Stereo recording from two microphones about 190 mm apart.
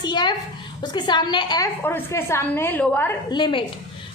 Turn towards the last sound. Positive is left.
turn(degrees=25)  # may be behind; listen again after turning